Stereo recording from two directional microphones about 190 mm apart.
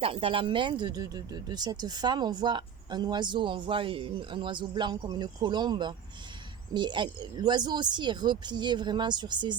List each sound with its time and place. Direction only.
0.0 s speech: 30° right (ahead or behind)